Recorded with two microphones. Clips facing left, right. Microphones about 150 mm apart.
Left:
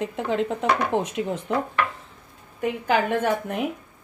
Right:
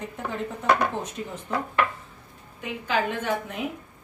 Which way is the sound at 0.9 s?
75° left (ahead or behind).